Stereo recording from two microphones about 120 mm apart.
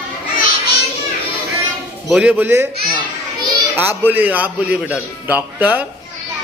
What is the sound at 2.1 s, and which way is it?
Speech, 10° right (ahead or behind).